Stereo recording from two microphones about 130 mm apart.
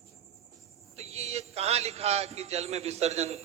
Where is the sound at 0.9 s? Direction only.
55° right (ahead or behind).